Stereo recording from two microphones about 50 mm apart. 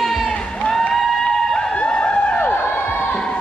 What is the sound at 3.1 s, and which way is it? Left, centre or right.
Music, left.